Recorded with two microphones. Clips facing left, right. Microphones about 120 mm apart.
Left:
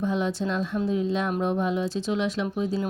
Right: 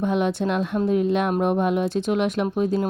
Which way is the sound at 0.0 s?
65° right (ahead or behind).